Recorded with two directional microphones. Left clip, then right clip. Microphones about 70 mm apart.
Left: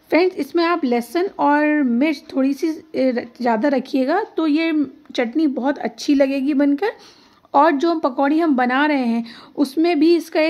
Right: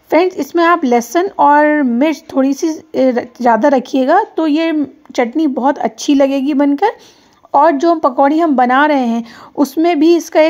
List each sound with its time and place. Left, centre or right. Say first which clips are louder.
0.1 s speech: right 5 dB; right
0.8 s speech: right 7 dB; right